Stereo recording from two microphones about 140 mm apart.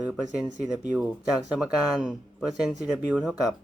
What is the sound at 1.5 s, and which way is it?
Speech, 5° right (ahead or behind).